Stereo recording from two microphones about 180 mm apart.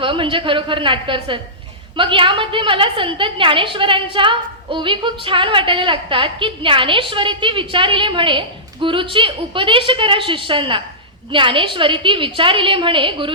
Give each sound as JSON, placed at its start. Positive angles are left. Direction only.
{"t": 0.0, "sound": "a woman's voice", "side_deg": -30}